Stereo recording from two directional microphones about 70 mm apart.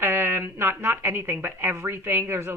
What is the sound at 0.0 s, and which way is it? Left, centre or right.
Speech, right.